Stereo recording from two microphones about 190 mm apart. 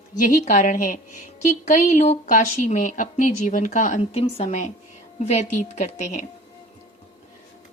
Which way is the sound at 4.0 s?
30° left (ahead or behind).